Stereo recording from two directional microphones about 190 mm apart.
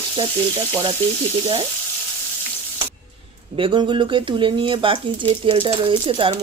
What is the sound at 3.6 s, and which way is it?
Speech, 25° right (ahead or behind).